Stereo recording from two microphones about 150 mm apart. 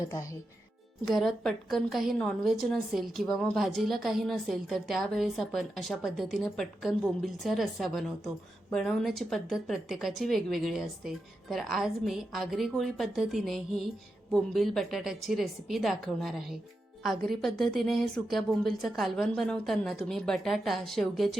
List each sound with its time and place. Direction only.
0.0 s speech: 20° left (ahead or behind)
1.0 s a woman's voice: centre (ahead or behind)